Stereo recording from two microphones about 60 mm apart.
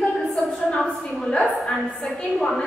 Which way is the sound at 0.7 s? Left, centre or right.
Centre.